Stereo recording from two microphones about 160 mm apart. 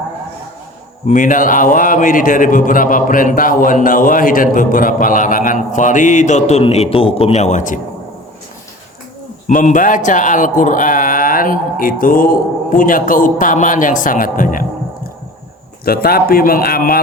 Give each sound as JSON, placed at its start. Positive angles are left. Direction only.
{"t": 1.0, "sound": "a man's voice", "side_deg": 55}
{"t": 9.5, "sound": "a man's voice", "side_deg": 55}
{"t": 15.8, "sound": "speech", "side_deg": 70}